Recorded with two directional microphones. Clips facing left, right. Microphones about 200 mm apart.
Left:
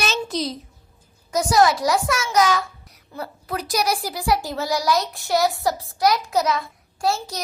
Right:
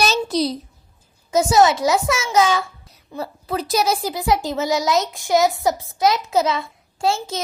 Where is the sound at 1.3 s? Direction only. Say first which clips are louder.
Right 3 dB; 25° right (ahead or behind).